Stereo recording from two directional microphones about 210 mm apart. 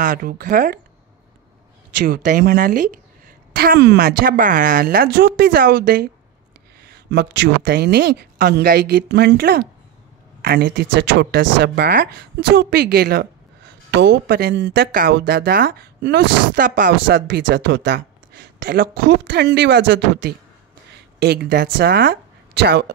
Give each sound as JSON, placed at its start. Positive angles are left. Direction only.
{"t": 0.0, "sound": "speech", "side_deg": -40}
{"t": 2.0, "sound": "speech", "side_deg": -45}
{"t": 17.0, "sound": "speech", "side_deg": -60}